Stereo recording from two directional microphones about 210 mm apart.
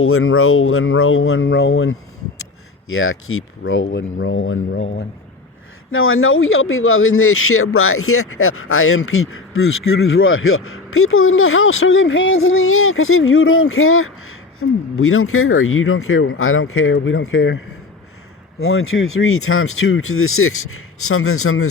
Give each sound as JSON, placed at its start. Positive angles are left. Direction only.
{"t": 0.0, "sound": "speech", "side_deg": 85}
{"t": 5.9, "sound": "speech", "side_deg": 75}
{"t": 18.6, "sound": "speech", "side_deg": 75}